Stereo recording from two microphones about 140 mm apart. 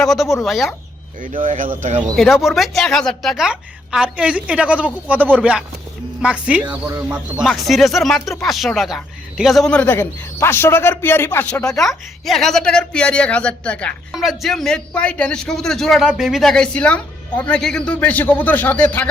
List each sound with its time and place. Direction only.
0.0 s speech: centre (ahead or behind)
1.5 s speech: 70° right (ahead or behind)
2.1 s a woman's voice: centre (ahead or behind)